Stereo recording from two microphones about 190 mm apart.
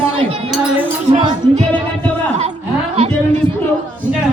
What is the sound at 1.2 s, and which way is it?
Music, 30° right (ahead or behind).